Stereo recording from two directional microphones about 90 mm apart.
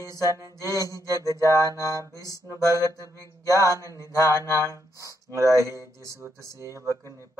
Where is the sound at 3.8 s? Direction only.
35° left (ahead or behind).